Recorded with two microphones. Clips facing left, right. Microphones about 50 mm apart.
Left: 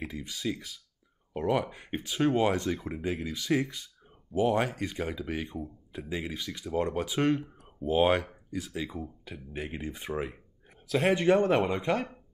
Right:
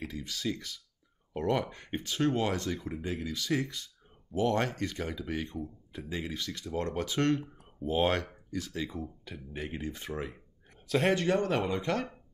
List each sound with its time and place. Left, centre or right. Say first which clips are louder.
0.0 s speech: left 1 dB; centre
10.9 s speech: left 1 dB; centre
11.1 s speech: left 5 dB; left